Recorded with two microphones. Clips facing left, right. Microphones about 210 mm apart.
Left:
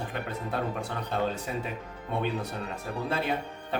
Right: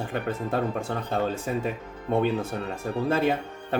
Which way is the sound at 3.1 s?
50° right (ahead or behind).